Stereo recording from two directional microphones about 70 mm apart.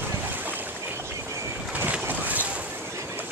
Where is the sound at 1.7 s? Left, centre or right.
Right.